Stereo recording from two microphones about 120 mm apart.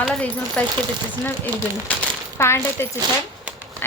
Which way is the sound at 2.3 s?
20° left (ahead or behind).